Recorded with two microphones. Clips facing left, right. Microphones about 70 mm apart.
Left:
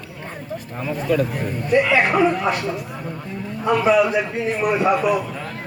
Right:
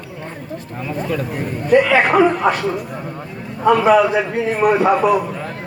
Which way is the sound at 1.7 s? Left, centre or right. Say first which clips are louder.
Right 4 dB; right.